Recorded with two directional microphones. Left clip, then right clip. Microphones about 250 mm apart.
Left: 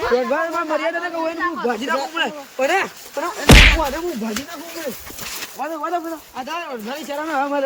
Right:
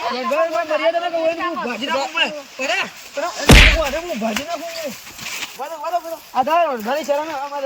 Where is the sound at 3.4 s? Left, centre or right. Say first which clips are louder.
Even; centre.